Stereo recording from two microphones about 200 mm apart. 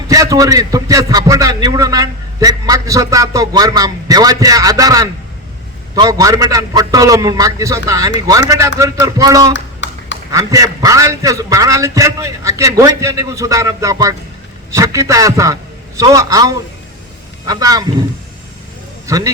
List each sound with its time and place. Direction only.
0.1 s a man's voice: 15° right (ahead or behind)
9.5 s a sound: 65° left (ahead or behind)
10.3 s a man's voice: 15° right (ahead or behind)
19.0 s a man's voice: 15° right (ahead or behind)